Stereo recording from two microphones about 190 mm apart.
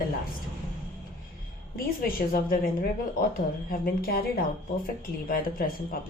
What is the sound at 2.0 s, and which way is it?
Speech, 50° left (ahead or behind).